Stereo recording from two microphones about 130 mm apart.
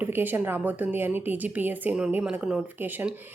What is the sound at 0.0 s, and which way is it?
Speech, 15° right (ahead or behind).